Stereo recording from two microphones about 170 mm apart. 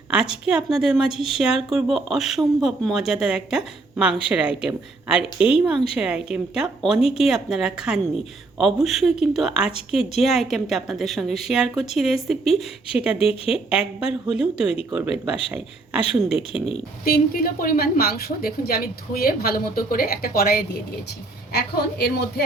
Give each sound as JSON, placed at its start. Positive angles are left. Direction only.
{"t": 0.1, "sound": "a woman's voice", "side_deg": -5}
{"t": 13.1, "sound": "speech", "side_deg": 35}
{"t": 13.5, "sound": "a woman's voice", "side_deg": -5}
{"t": 17.1, "sound": "a woman's voice", "side_deg": 60}